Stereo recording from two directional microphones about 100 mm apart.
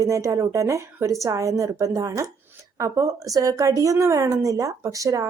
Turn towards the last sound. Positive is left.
turn(degrees=-35)  # may be behind; listen again after turning